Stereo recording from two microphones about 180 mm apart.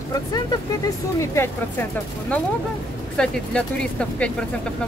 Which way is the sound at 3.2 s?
5° left (ahead or behind).